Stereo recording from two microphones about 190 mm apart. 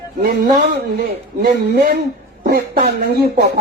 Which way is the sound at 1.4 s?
55° right (ahead or behind).